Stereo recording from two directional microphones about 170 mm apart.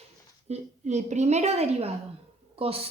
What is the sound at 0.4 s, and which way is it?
A woman's voice, 40° right (ahead or behind).